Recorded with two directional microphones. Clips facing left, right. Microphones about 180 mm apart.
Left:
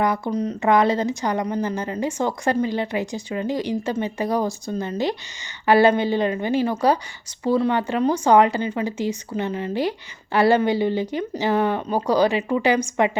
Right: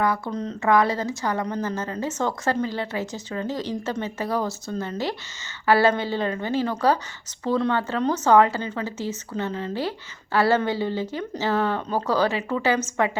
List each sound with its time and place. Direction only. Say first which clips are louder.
0.0 s speech: left 3 dB; 15° left (ahead or behind)